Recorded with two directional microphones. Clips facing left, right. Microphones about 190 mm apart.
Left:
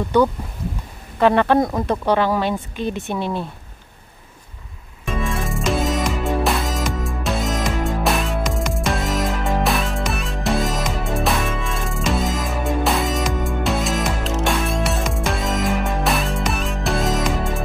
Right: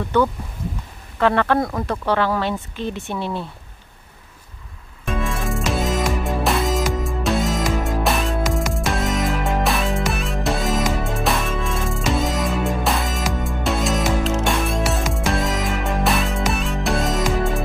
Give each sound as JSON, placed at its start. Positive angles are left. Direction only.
{"t": 0.1, "sound": "speech", "side_deg": 15}
{"t": 5.0, "sound": "music", "side_deg": 0}